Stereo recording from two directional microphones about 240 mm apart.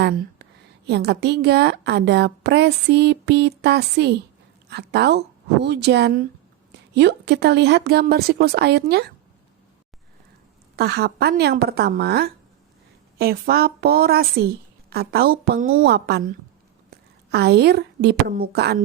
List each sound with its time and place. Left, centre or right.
0.0 s a sound: right
0.9 s a woman's voice: right
10.8 s a woman's voice: right
17.3 s a woman's voice: right